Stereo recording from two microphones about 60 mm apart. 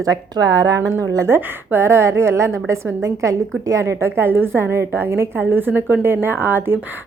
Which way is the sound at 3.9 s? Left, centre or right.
Right.